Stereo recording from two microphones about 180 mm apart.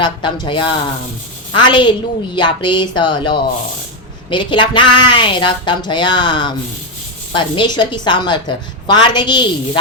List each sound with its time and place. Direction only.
0.0 s speech: 25° left (ahead or behind)